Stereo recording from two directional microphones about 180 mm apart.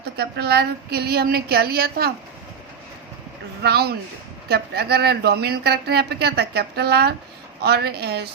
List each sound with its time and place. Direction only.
0.0 s speech: 65° right (ahead or behind)
3.6 s speech: 60° right (ahead or behind)